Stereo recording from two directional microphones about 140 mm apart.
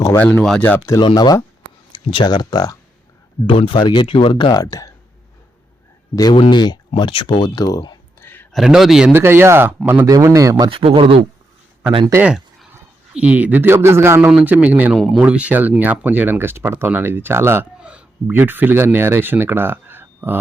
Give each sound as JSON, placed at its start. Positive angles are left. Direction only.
{"t": 0.2, "sound": "a man's voice", "side_deg": 5}
{"t": 0.9, "sound": "speech", "side_deg": 30}
{"t": 3.4, "sound": "speech", "side_deg": 40}
{"t": 6.1, "sound": "speech", "side_deg": 30}
{"t": 8.2, "sound": "a sound", "side_deg": 15}
{"t": 8.5, "sound": "a man's voice", "side_deg": 0}
{"t": 9.1, "sound": "speech", "side_deg": -15}
{"t": 10.1, "sound": "speech", "side_deg": -25}
{"t": 10.7, "sound": "speech", "side_deg": -40}
{"t": 12.1, "sound": "speech", "side_deg": -15}
{"t": 14.9, "sound": "a man's voice", "side_deg": 0}
{"t": 15.2, "sound": "speech", "side_deg": -10}